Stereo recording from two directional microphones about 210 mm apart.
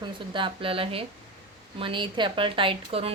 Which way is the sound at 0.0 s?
25° right (ahead or behind).